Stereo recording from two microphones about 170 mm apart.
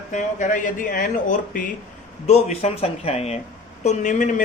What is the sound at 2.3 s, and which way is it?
A man's voice, 40° left (ahead or behind).